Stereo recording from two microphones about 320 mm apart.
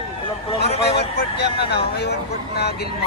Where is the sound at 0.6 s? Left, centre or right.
Left.